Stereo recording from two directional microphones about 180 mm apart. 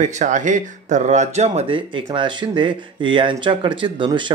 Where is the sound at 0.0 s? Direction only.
40° right (ahead or behind).